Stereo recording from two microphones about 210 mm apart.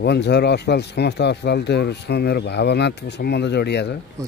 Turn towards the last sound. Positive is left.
turn(degrees=55)  # may be behind; listen again after turning